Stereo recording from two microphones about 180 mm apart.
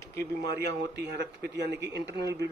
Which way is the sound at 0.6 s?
65° right (ahead or behind).